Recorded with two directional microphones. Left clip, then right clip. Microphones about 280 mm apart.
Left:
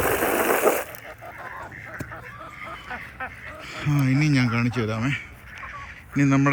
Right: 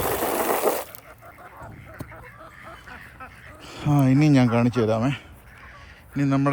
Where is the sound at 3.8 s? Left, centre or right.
Centre.